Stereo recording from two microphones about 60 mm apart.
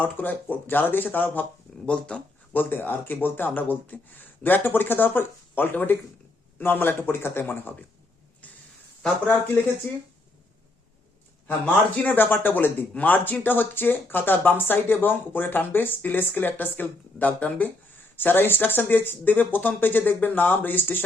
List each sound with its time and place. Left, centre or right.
0.0 s speech: left
1.9 s speech: centre
2.5 s speech: left
11.4 s speech: left